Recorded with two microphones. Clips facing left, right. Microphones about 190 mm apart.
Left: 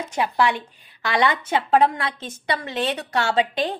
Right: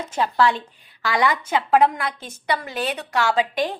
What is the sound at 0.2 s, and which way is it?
A woman's voice, 15° left (ahead or behind).